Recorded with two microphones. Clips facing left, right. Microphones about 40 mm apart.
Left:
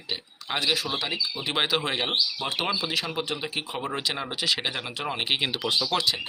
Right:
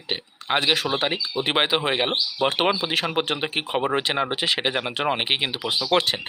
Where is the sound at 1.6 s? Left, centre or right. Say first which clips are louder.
Right 3 dB; right.